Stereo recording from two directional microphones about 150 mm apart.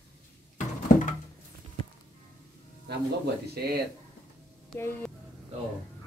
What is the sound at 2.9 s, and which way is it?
Speech, 90° right.